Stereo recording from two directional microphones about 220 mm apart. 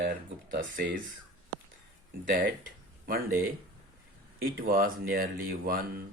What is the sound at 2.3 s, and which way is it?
Speech, 40° right (ahead or behind).